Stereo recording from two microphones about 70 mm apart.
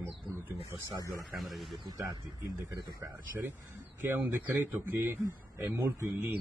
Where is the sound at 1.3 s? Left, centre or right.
Centre.